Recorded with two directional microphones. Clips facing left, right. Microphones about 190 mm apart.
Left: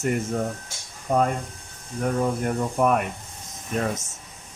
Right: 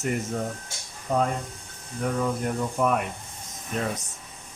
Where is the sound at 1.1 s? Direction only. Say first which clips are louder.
Left 3 dB; 50° left (ahead or behind).